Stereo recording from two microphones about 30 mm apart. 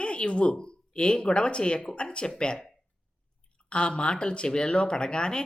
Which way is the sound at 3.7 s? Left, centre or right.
Left.